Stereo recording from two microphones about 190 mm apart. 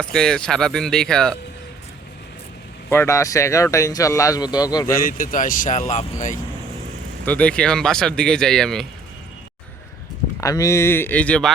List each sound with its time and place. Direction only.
0.0 s speech: 5° left (ahead or behind)
2.9 s speech: 15° left (ahead or behind)
4.9 s speech: 45° left (ahead or behind)
7.3 s speech: 5° left (ahead or behind)
10.4 s speech: 20° left (ahead or behind)